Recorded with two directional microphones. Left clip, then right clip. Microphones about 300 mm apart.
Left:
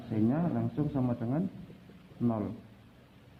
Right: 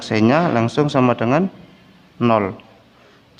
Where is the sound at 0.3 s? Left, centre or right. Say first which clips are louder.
Right 17 dB; right.